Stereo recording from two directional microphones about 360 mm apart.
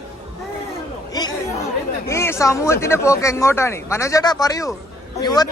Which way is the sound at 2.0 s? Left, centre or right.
Centre.